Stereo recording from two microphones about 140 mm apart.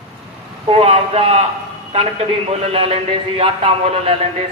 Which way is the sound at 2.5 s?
45° right (ahead or behind).